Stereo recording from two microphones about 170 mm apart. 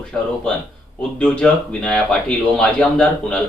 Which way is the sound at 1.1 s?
5° left (ahead or behind).